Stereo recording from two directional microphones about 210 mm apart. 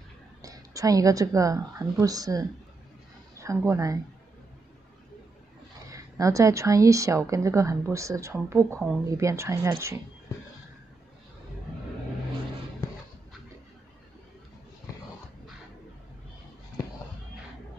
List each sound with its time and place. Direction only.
0.4 s a woman's voice: 15° right (ahead or behind)
5.9 s a woman's voice: 15° right (ahead or behind)